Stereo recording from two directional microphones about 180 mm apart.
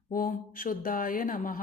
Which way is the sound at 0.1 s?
50° left (ahead or behind).